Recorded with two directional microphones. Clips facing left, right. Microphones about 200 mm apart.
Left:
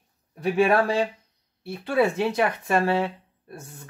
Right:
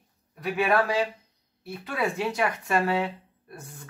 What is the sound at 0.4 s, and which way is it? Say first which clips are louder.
Speech: left 4 dB; 30° left (ahead or behind).